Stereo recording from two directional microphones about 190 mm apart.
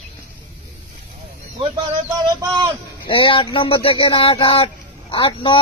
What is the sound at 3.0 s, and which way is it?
Speech, 30° left (ahead or behind).